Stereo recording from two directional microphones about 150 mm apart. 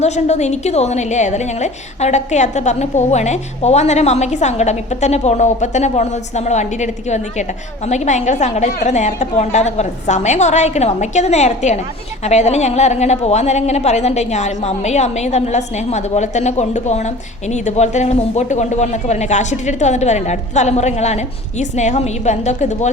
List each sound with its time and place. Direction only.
0.0 s a woman's voice: 50° left (ahead or behind)